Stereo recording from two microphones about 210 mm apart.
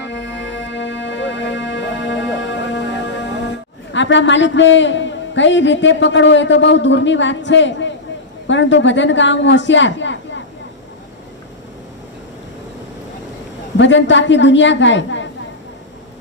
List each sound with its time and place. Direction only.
0.0 s music: 60° left (ahead or behind)
3.9 s a man's voice: 60° left (ahead or behind)
13.7 s a man's voice: 60° left (ahead or behind)